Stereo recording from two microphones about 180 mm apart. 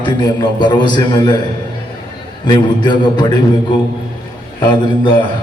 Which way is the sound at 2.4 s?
25° left (ahead or behind).